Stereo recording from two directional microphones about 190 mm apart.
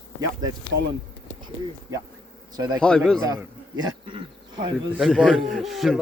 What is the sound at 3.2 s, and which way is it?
Speech, 20° right (ahead or behind).